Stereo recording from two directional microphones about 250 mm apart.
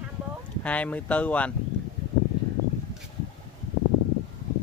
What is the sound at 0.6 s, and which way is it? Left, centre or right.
Speech, centre.